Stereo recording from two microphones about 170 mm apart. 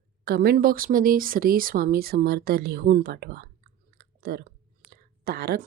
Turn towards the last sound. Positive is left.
turn(degrees=-65)  # may be behind; listen again after turning